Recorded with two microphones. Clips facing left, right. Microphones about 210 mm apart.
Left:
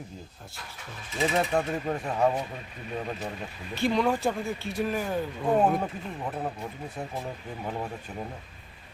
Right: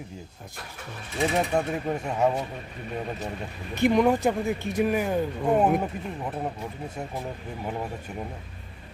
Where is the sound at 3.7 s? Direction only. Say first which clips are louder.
Right 5 dB; 20° right (ahead or behind).